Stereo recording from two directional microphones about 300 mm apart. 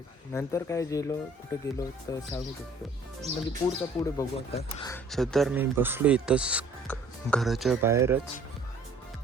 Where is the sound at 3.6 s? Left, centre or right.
Centre.